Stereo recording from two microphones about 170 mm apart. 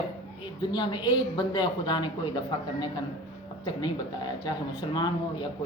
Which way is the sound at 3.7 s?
25° left (ahead or behind).